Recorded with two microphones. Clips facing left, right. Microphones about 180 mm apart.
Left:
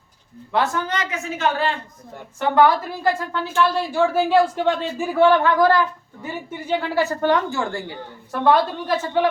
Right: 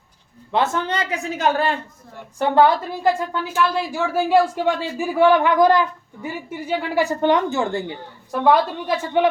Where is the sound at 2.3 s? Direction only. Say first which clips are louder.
Right 1 dB; 30° right (ahead or behind).